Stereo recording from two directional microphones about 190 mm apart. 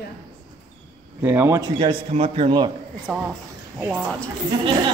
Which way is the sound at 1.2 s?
10° right (ahead or behind).